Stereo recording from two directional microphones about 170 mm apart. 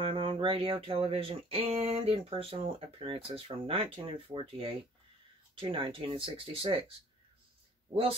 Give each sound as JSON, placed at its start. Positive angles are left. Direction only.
{"t": 0.0, "sound": "speech", "side_deg": -30}